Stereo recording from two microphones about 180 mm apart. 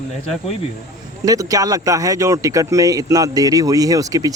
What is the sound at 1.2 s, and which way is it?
Speech, 20° right (ahead or behind).